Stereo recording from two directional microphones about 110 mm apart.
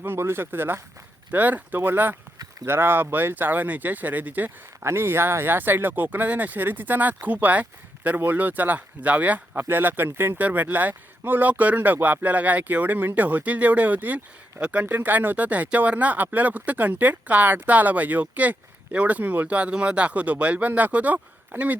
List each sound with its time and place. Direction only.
0.0 s speech: 20° right (ahead or behind)